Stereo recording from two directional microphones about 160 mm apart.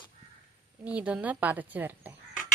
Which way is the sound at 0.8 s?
10° right (ahead or behind).